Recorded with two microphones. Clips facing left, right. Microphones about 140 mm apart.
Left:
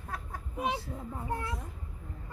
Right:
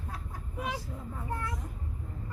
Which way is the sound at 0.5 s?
25° left (ahead or behind).